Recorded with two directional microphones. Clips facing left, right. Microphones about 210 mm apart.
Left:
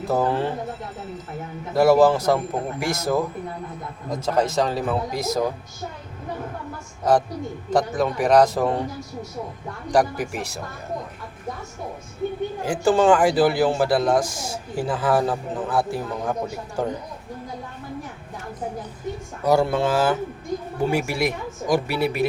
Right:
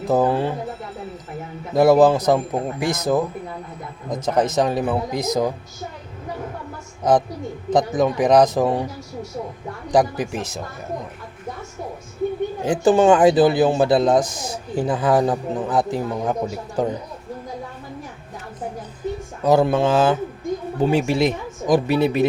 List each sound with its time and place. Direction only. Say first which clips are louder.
0.1 s speech: right 4 dB; 15° right (ahead or behind)
1.7 s speech: right 2 dB; 20° right (ahead or behind)
7.7 s speech: right 3 dB; 20° right (ahead or behind)
9.9 s speech: right 2 dB; 20° right (ahead or behind)
12.6 s speech: right 3 dB; 20° right (ahead or behind)
19.5 s speech: right 3 dB; 20° right (ahead or behind)